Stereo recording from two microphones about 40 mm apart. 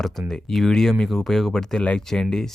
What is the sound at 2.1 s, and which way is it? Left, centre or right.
Speech, centre.